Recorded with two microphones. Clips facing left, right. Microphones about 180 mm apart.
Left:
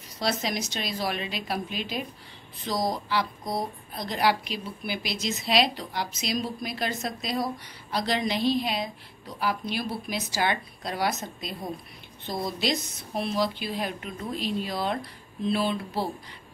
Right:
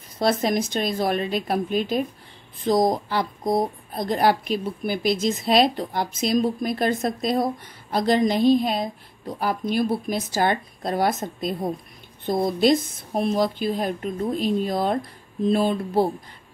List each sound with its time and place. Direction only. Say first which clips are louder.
0.2 s speech: right 7 dB; 50° right (ahead or behind)